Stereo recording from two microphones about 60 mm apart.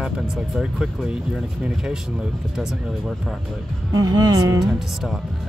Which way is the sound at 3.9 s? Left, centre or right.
Right.